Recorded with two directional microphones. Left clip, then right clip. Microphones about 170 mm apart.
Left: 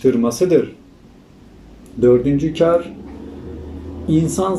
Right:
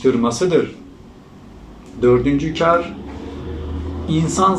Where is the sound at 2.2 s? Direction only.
50° left (ahead or behind).